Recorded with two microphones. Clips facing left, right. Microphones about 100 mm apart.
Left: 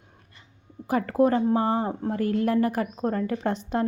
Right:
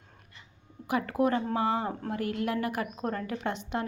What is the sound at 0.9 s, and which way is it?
A woman's voice, 35° left (ahead or behind).